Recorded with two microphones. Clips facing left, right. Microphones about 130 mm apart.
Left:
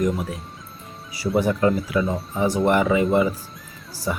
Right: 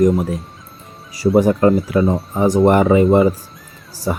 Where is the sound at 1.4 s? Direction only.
40° right (ahead or behind).